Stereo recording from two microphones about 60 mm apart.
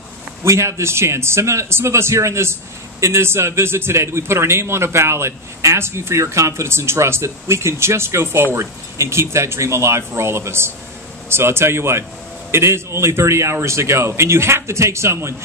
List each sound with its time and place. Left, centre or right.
0.4 s a man's voice: right